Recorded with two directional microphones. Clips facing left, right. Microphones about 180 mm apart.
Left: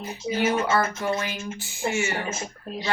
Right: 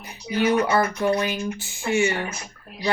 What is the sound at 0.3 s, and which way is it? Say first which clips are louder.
Speech: right 3 dB; 25° left (ahead or behind).